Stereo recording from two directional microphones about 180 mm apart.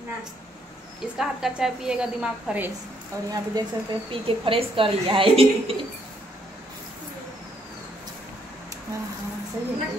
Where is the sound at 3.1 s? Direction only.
15° right (ahead or behind).